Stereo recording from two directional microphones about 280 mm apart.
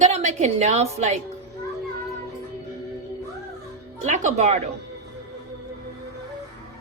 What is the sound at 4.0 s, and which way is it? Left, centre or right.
Speech, right.